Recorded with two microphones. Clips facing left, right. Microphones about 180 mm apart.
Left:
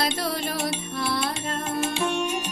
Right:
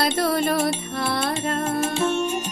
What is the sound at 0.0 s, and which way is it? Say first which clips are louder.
Music: right 6 dB; 55° right (ahead or behind).